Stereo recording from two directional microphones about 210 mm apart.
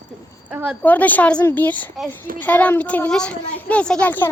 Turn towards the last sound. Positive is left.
turn(degrees=10)  # may be behind; listen again after turning